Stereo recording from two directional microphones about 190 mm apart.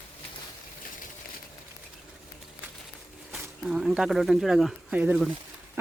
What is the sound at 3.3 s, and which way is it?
Speech, 5° right (ahead or behind).